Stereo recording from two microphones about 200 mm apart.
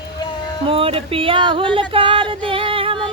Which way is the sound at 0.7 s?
30° right (ahead or behind).